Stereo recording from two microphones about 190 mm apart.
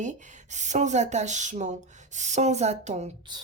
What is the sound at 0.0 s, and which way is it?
Speech, 40° right (ahead or behind).